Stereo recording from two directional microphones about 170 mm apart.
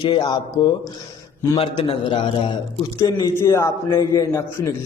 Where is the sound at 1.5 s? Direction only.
30° left (ahead or behind).